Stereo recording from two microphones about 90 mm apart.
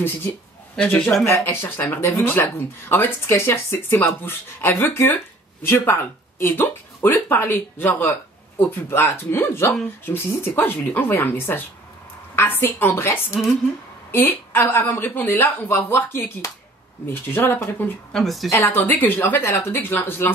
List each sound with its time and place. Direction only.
0.8 s speech: 15° left (ahead or behind)
1.2 s speech: 30° left (ahead or behind)
18.1 s a woman's voice: centre (ahead or behind)
18.5 s speech: 25° left (ahead or behind)